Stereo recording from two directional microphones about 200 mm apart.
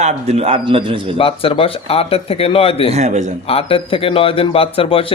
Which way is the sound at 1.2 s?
25° left (ahead or behind).